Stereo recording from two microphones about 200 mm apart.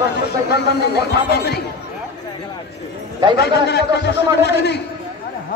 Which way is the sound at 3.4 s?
55° left (ahead or behind).